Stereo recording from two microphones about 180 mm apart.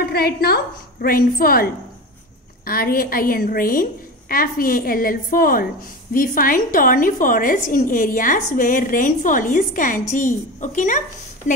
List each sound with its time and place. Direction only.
0.0 s a woman's voice: 60° left (ahead or behind)